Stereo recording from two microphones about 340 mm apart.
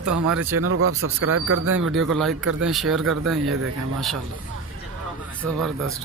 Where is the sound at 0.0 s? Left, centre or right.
Right.